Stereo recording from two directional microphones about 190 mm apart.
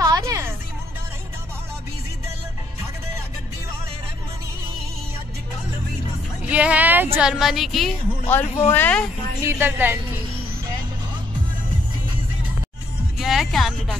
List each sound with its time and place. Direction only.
0.0 s music: 20° right (ahead or behind)
6.4 s music: 5° right (ahead or behind)
7.2 s a woman's voice: centre (ahead or behind)
9.4 s a woman's voice: 10° right (ahead or behind)
13.2 s speech: centre (ahead or behind)